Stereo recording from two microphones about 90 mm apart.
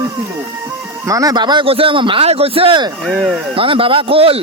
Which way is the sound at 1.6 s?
90° right.